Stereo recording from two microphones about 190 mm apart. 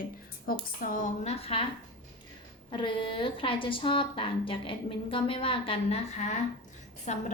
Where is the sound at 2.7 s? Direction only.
25° left (ahead or behind).